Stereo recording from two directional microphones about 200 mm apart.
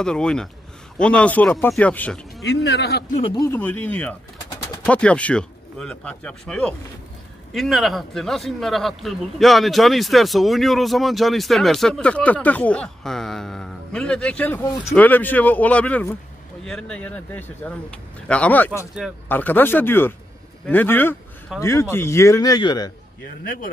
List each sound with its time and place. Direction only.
0.0 s a man's voice: 5° left (ahead or behind)
2.4 s a man's voice: 55° left (ahead or behind)
3.3 s a man's voice: 10° left (ahead or behind)